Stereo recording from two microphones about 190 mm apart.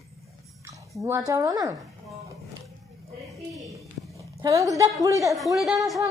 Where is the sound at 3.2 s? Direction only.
Centre (ahead or behind).